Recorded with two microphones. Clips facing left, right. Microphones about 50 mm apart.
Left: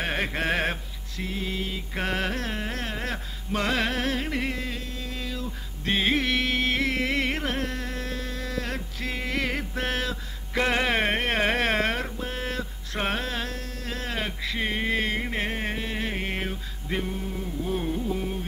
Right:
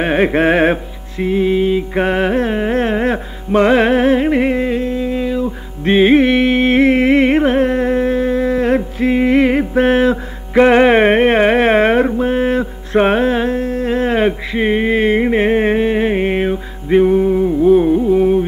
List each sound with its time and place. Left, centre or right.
0.0 s music: right